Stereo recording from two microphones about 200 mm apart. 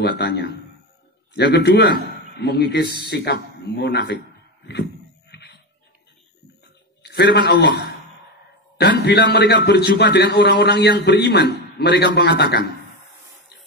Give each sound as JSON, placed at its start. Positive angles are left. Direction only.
{"t": 0.0, "sound": "a man's voice", "side_deg": 50}
{"t": 5.3, "sound": "dog", "side_deg": 55}
{"t": 7.0, "sound": "a sound", "side_deg": 55}
{"t": 7.3, "sound": "a man's voice", "side_deg": 55}